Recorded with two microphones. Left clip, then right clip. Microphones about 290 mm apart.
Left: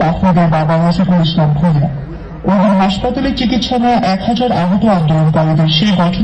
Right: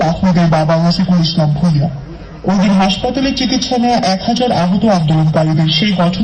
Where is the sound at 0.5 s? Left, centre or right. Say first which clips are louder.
Right 1 dB; right.